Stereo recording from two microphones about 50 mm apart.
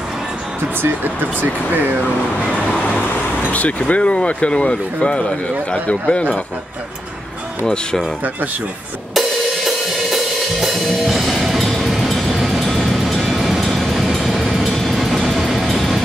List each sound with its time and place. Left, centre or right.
3.5 s speech: left
7.6 s speech: centre
9.7 s music: centre
13.2 s vehicle: centre
14.1 s train: centre